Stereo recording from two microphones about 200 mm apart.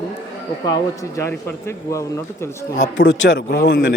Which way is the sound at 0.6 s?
15° left (ahead or behind).